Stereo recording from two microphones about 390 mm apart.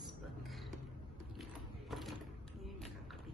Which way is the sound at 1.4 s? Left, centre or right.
Centre.